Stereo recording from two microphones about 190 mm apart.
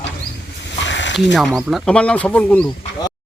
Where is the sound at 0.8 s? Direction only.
70° left (ahead or behind).